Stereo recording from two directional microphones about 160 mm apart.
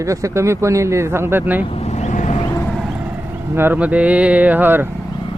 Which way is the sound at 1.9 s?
45° left (ahead or behind).